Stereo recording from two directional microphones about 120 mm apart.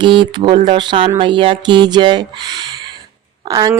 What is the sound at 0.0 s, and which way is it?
Speech, 45° right (ahead or behind).